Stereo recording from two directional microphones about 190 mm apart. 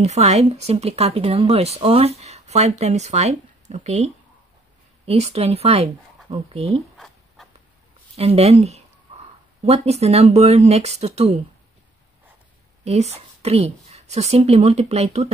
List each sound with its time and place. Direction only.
0.0 s speech: 35° right (ahead or behind)
8.2 s speech: 30° right (ahead or behind)
12.8 s speech: 35° right (ahead or behind)